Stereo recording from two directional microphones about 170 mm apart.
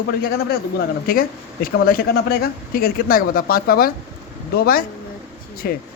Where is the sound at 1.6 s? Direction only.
60° left (ahead or behind).